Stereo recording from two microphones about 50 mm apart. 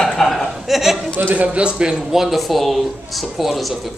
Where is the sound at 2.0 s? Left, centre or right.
Centre.